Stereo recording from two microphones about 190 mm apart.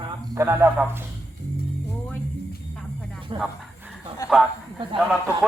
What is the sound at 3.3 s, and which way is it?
Speech, 30° right (ahead or behind).